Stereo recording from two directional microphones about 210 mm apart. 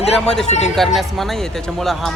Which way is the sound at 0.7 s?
Centre (ahead or behind).